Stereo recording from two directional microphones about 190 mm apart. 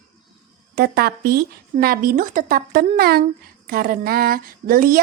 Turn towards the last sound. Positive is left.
turn(degrees=-50)  # may be behind; listen again after turning